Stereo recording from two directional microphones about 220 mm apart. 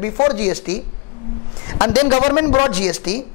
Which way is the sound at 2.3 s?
15° left (ahead or behind).